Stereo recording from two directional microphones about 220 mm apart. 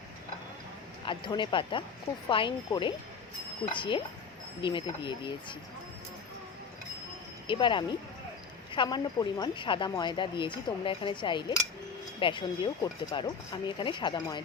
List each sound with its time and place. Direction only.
1.0 s speech: 20° left (ahead or behind)
7.4 s speech: 20° left (ahead or behind)